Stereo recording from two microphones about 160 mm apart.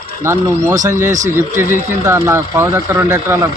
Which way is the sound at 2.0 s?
15° right (ahead or behind).